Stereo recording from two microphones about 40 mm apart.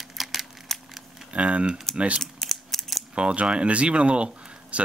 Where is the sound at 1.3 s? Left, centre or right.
Right.